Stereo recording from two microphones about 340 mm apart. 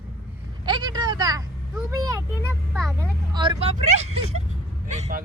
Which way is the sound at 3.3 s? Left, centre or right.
Centre.